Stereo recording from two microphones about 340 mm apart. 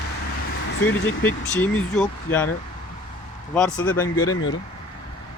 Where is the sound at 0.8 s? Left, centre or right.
Centre.